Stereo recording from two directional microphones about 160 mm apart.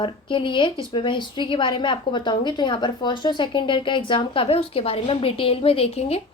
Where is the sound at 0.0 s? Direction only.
30° left (ahead or behind).